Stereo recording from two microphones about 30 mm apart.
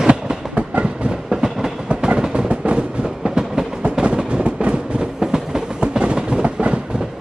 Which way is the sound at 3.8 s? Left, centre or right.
Right.